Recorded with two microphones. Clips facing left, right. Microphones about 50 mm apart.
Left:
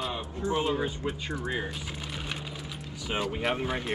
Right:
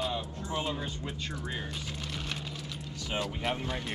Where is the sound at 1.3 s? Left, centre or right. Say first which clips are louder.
Left 6 dB; centre.